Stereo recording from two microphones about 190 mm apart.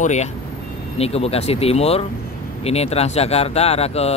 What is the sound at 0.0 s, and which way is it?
Speech, 40° left (ahead or behind).